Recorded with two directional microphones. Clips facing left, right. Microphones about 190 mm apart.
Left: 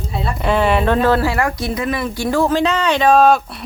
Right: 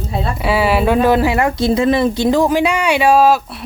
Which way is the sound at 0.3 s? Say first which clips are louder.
Even; 5° right (ahead or behind).